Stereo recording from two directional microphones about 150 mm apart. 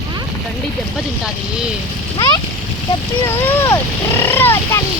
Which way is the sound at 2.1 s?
25° left (ahead or behind).